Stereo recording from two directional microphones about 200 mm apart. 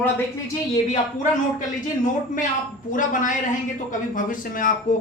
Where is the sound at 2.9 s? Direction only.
40° left (ahead or behind).